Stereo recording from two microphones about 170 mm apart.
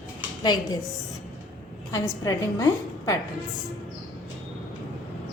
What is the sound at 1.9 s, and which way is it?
A woman's voice, 20° left (ahead or behind).